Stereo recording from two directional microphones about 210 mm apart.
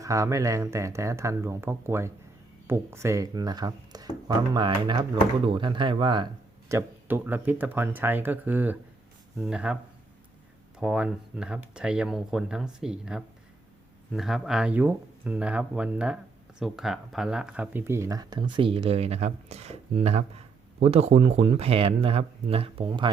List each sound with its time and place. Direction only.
0.0 s speech: 15° right (ahead or behind)
6.7 s speech: 10° right (ahead or behind)
10.8 s speech: 5° right (ahead or behind); by 23.1 s 25° right (ahead or behind)